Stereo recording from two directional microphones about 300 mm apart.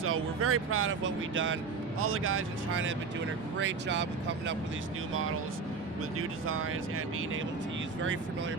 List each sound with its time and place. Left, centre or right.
0.0 s speech: right
6.1 s speech: right